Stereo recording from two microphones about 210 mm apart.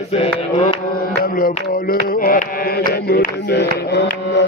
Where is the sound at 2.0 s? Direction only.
45° left (ahead or behind).